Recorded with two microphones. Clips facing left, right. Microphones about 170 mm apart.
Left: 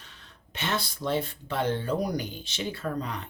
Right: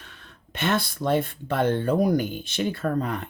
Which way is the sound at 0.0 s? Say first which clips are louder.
Right 4 dB; 55° right (ahead or behind).